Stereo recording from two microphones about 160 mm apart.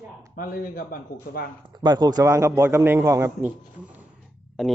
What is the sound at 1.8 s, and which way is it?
Speech, 25° right (ahead or behind).